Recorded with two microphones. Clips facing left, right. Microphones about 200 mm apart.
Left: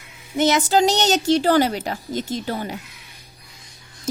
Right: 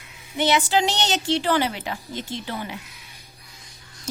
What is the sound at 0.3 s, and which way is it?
Speech, 45° left (ahead or behind).